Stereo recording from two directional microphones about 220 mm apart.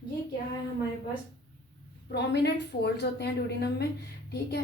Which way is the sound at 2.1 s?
50° left (ahead or behind).